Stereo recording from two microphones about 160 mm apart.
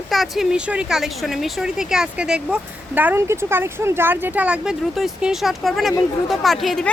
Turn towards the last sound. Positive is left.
turn(degrees=0)  # may be behind; listen again after turning